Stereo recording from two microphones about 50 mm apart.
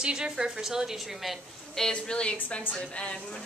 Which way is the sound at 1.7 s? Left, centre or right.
Centre.